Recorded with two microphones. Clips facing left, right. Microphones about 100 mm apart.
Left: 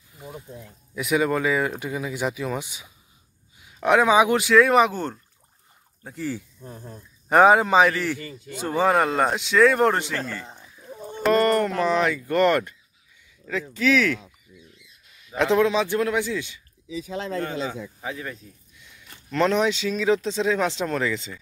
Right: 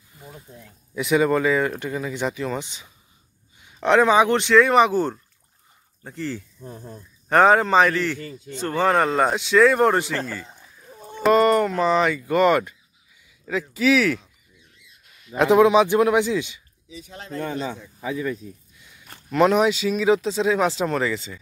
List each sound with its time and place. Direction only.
0.1 s a sound: 10° left (ahead or behind)
0.9 s a man's voice: centre (ahead or behind)
6.6 s a man's voice: 5° right (ahead or behind)
7.2 s a man's voice: 10° left (ahead or behind)
15.3 s a man's voice: 15° right (ahead or behind)
19.3 s a man's voice: 10° right (ahead or behind)